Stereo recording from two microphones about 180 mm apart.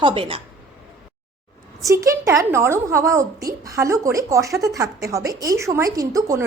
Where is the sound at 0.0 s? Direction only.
30° right (ahead or behind).